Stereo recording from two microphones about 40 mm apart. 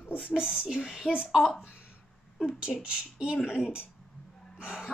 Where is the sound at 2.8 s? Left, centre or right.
Right.